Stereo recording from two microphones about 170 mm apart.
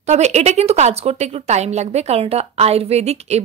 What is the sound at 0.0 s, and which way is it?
A woman's voice, 40° right (ahead or behind).